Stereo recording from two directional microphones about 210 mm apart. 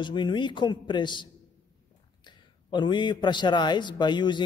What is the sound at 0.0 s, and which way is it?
A man's voice, 20° left (ahead or behind).